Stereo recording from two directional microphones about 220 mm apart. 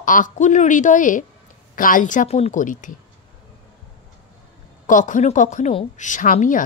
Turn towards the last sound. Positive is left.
turn(degrees=35)  # may be behind; listen again after turning